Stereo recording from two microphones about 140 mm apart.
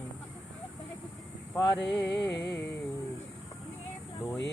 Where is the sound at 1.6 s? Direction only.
10° left (ahead or behind).